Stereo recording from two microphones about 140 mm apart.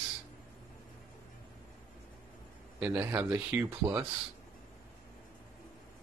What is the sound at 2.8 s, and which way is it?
Speech, 10° right (ahead or behind).